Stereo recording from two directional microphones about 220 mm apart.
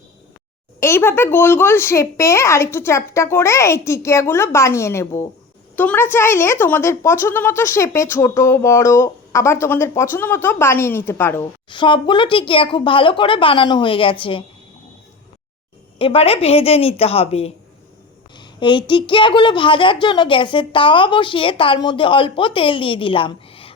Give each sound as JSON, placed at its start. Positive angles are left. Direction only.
{"t": 0.8, "sound": "a woman's voice", "side_deg": 10}
{"t": 11.7, "sound": "a child's voice", "side_deg": 20}
{"t": 16.0, "sound": "a child's voice", "side_deg": 25}